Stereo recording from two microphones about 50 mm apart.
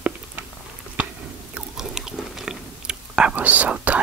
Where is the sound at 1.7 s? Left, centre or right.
Centre.